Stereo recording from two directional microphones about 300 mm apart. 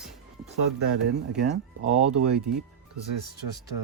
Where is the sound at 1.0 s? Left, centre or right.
Right.